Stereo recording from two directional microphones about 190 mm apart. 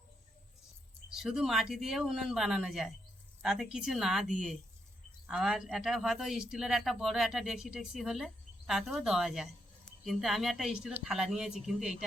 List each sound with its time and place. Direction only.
1.1 s speech: centre (ahead or behind)